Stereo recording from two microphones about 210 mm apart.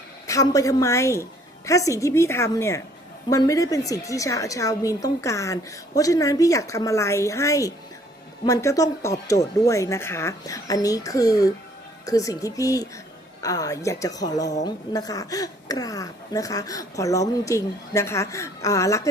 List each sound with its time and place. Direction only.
0.3 s speech: 15° left (ahead or behind)